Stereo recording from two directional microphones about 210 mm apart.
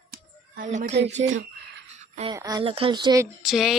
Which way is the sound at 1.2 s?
60° right (ahead or behind).